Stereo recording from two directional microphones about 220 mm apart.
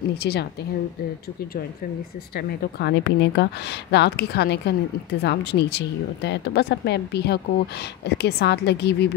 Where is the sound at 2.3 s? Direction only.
50° left (ahead or behind).